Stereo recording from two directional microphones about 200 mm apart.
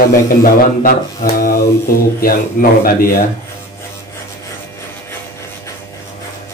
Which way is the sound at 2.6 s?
45° left (ahead or behind).